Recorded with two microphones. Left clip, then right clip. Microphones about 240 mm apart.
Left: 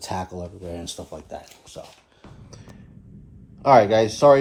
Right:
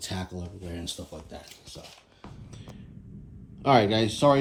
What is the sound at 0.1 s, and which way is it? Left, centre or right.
Speech, centre.